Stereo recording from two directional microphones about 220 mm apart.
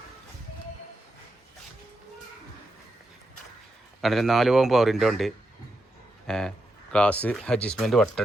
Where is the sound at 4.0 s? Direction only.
Centre (ahead or behind).